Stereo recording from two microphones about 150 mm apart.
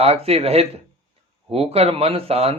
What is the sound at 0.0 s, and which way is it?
Speech, 45° right (ahead or behind).